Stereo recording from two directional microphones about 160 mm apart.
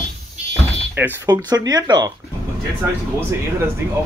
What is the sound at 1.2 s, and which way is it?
Speech, 25° right (ahead or behind).